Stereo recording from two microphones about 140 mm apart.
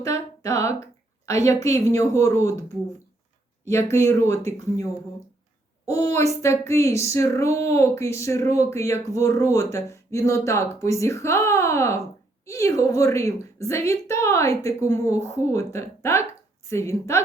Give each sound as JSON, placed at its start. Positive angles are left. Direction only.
{"t": 0.0, "sound": "speech", "side_deg": 25}
{"t": 3.7, "sound": "speech", "side_deg": 20}
{"t": 5.9, "sound": "speech", "side_deg": 25}